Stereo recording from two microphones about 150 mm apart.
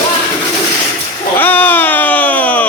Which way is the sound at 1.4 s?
10° left (ahead or behind).